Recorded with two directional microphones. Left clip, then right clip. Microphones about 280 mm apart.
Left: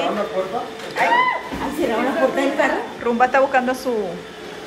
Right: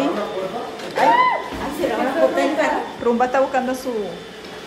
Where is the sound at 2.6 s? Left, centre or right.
Left.